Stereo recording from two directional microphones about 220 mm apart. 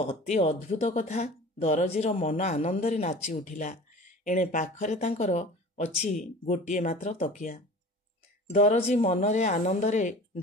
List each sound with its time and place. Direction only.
0.1 s speech: 30° left (ahead or behind)